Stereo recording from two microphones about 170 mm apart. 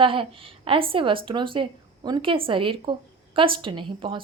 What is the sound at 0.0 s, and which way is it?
A woman's voice, 30° right (ahead or behind).